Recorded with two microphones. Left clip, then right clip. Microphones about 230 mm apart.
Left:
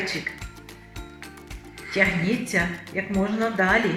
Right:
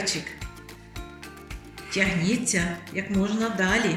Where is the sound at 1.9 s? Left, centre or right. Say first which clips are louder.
Left 3 dB; left.